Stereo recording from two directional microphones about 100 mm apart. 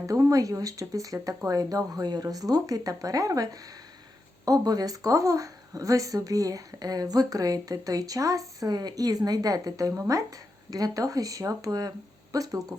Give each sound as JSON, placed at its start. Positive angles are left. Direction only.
{"t": 0.1, "sound": "speech", "side_deg": -35}